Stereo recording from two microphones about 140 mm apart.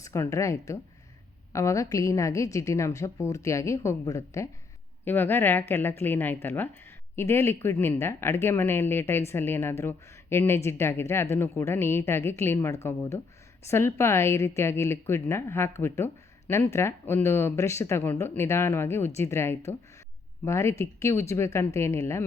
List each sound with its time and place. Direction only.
0.0 s speech: 20° left (ahead or behind)